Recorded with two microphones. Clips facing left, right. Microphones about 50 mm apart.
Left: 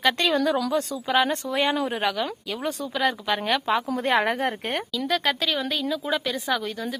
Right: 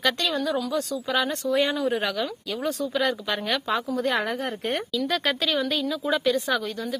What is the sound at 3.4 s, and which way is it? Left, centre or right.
Speech, centre.